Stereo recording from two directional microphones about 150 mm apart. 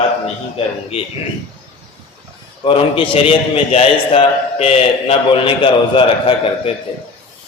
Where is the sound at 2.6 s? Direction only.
35° left (ahead or behind).